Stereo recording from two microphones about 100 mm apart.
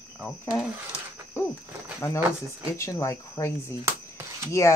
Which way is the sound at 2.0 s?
25° left (ahead or behind).